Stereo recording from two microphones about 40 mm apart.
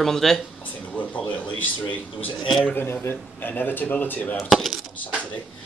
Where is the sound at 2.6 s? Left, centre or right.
Left.